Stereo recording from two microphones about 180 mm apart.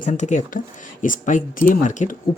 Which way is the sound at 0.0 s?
40° left (ahead or behind).